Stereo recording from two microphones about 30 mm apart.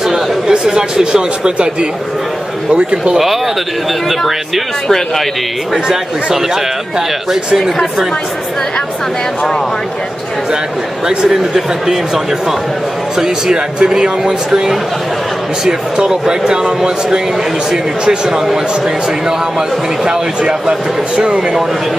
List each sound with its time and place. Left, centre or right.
0.5 s speech: right
4.8 s speech: centre
13.8 s speech: right
20.1 s speech: right